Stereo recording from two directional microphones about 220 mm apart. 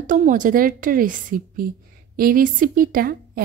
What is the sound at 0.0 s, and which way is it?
A woman's voice, 35° right (ahead or behind).